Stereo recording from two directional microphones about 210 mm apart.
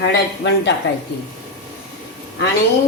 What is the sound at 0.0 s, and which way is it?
Speech, 60° left (ahead or behind).